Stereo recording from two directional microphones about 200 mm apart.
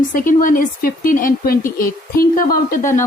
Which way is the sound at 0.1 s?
45° left (ahead or behind).